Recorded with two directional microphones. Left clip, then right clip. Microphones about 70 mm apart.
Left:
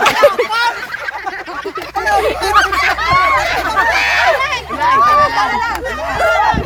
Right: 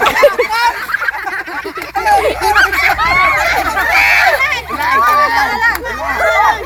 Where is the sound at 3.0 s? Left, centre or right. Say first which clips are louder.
Even; left.